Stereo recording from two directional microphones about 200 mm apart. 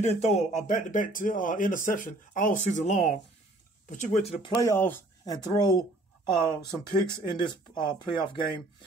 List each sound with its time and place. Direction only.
0.0 s speech: 35° left (ahead or behind)
4.6 s speech: 15° left (ahead or behind)